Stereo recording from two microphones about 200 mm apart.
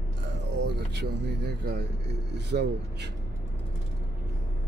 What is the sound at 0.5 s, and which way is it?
Speech, 55° right (ahead or behind).